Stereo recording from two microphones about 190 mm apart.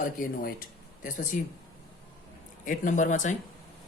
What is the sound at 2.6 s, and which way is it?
Speech, 40° left (ahead or behind).